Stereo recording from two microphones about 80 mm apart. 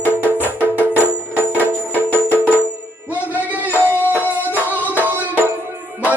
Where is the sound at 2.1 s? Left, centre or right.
Left.